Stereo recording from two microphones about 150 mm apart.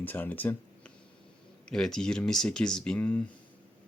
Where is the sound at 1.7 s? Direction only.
5° left (ahead or behind).